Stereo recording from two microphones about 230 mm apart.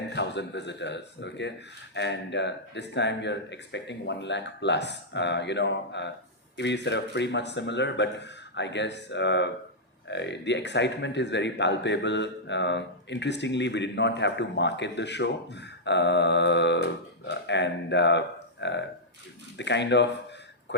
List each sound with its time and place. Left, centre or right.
0.1 s speech: left